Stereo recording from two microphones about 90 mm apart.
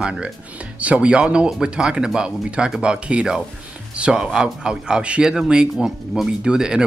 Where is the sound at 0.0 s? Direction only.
10° right (ahead or behind).